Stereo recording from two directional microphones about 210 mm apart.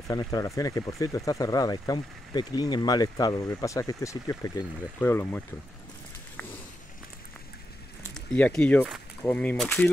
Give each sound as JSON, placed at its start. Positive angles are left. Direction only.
{"t": 0.1, "sound": "speech", "side_deg": 15}
{"t": 8.1, "sound": "speech", "side_deg": 5}